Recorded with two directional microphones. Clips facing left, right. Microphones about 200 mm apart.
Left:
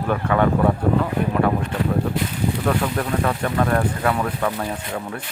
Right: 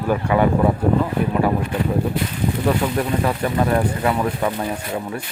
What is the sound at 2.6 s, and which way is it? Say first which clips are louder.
Speech: right 3 dB; 10° right (ahead or behind).